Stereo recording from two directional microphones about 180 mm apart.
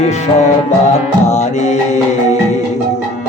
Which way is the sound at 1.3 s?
40° left (ahead or behind).